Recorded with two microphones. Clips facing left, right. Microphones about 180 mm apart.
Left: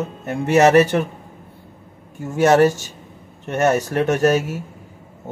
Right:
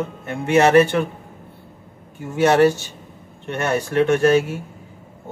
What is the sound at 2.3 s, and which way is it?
Speech, 45° left (ahead or behind).